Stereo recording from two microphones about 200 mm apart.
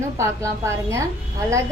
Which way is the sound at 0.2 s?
15° right (ahead or behind).